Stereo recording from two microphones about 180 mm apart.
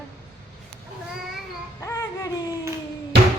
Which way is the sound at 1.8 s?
15° left (ahead or behind).